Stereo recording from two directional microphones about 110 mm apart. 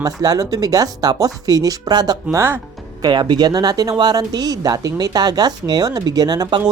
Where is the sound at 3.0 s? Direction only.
45° right (ahead or behind).